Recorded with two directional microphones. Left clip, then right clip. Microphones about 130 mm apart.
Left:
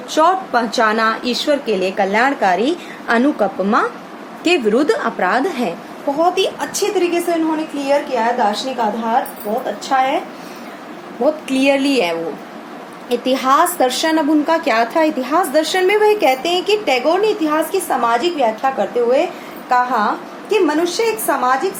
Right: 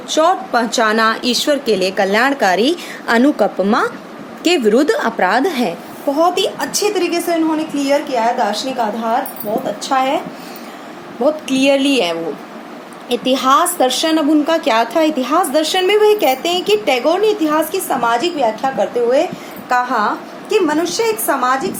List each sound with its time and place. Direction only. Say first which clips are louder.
0.1 s a woman's voice: even; 20° right (ahead or behind)
7.8 s a woman's voice: right 1 dB; 20° right (ahead or behind)
9.9 s a woman's voice: even; 30° right (ahead or behind)
11.2 s a woman's voice: right 1 dB; 20° right (ahead or behind)